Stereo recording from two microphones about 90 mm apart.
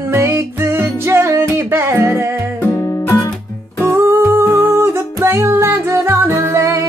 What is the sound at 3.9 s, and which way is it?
Music, 30° right (ahead or behind).